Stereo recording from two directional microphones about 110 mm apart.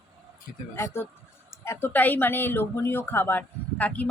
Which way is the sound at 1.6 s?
20° left (ahead or behind).